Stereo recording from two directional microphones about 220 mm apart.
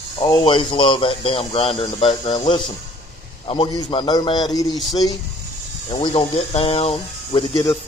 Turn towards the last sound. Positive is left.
turn(degrees=20)  # may be behind; listen again after turning